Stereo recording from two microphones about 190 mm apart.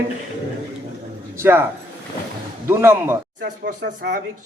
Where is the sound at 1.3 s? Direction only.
10° right (ahead or behind).